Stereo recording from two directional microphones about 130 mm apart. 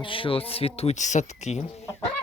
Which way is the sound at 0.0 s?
40° left (ahead or behind).